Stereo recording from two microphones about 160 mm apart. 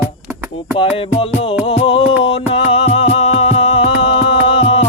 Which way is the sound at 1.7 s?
35° left (ahead or behind).